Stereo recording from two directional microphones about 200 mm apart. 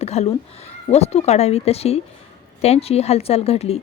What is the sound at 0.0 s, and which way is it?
Speech, 30° left (ahead or behind).